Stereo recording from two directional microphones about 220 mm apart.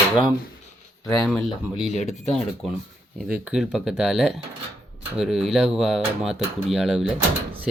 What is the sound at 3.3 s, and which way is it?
Speech, 5° right (ahead or behind).